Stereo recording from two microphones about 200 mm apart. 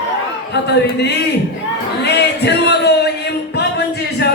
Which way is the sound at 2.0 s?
55° left (ahead or behind).